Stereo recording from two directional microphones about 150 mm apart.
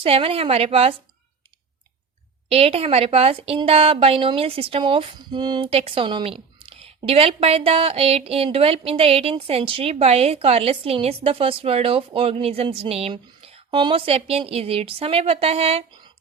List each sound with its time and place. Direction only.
0.0 s a woman's voice: 40° right (ahead or behind)
2.5 s a woman's voice: 40° right (ahead or behind)